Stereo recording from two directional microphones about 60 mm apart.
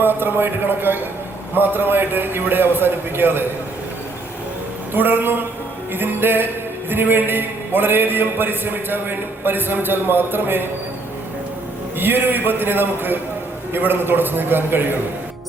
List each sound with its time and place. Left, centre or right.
0.0 s a man's voice: right
4.9 s a man's voice: right
11.9 s a man's voice: right